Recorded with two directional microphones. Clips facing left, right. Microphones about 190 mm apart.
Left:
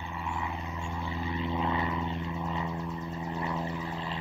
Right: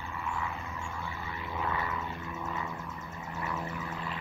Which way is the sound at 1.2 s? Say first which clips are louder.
Left 6 dB; 20° left (ahead or behind).